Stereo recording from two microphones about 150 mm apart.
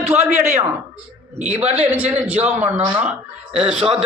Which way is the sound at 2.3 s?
45° right (ahead or behind).